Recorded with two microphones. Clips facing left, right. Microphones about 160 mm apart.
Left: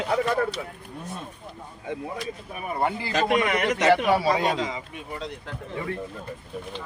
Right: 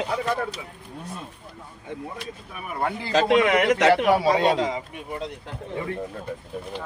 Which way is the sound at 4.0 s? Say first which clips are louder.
Right 3 dB; 20° right (ahead or behind).